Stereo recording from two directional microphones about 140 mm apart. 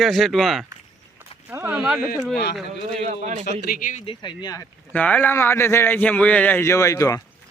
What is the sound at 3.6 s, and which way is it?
Speech, 80° left.